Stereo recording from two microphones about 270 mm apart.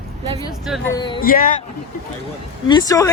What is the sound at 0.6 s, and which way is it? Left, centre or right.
Speech, centre.